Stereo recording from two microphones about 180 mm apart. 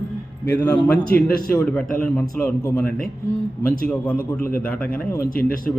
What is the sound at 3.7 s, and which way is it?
Speech, 10° left (ahead or behind).